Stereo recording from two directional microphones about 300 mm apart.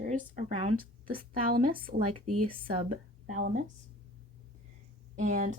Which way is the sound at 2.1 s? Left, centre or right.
Right.